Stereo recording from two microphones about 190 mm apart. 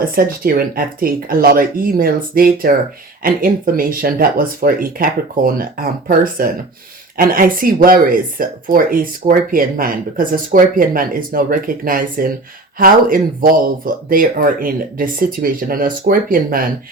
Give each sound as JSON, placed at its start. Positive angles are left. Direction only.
{"t": 0.2, "sound": "speech", "side_deg": -50}